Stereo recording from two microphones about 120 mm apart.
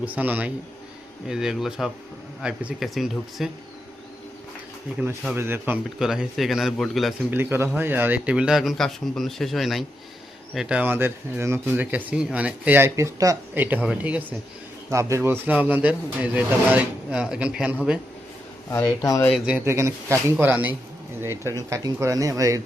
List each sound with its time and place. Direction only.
0.0 s speech: 15° right (ahead or behind)
5.4 s speech: 20° right (ahead or behind)
6.0 s speech: 5° right (ahead or behind)
7.3 s speech: 20° right (ahead or behind)
13.5 s speech: 15° right (ahead or behind)
18.7 s speech: 25° left (ahead or behind)
19.6 s speech: 25° right (ahead or behind)
21.5 s speech: 25° right (ahead or behind)